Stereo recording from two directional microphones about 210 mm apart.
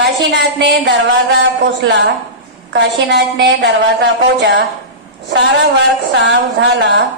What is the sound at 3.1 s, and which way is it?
A woman's voice, 55° right (ahead or behind).